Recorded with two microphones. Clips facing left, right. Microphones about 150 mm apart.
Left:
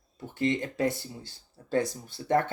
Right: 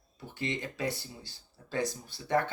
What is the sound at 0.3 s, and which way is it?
Speech, 50° left (ahead or behind).